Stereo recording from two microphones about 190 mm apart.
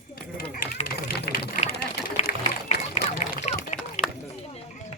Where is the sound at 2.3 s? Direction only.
50° left (ahead or behind).